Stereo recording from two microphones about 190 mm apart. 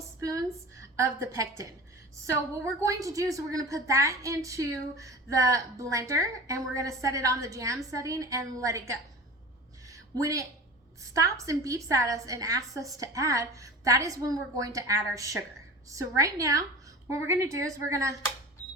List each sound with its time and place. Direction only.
0.2 s a woman's voice: 15° right (ahead or behind)
2.8 s a woman's voice: 15° right (ahead or behind)
9.9 s a sound: 15° right (ahead or behind)
11.1 s a woman's voice: 15° right (ahead or behind)